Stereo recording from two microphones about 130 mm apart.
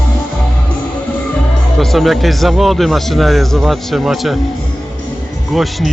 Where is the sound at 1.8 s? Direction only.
Centre (ahead or behind).